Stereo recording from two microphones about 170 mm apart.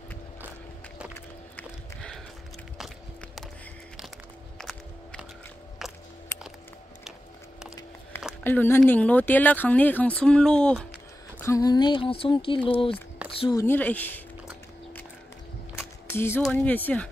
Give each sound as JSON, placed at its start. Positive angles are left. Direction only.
{"t": 1.1, "sound": "music", "side_deg": 5}
{"t": 4.6, "sound": "walk", "side_deg": 0}
{"t": 5.8, "sound": "music", "side_deg": 0}
{"t": 8.5, "sound": "speech", "side_deg": 15}
{"t": 11.3, "sound": "speech", "side_deg": 15}
{"t": 13.7, "sound": "speech", "side_deg": 10}
{"t": 16.1, "sound": "speech", "side_deg": 15}